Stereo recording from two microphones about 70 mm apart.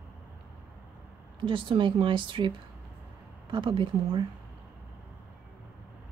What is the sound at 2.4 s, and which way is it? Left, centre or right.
Speech, right.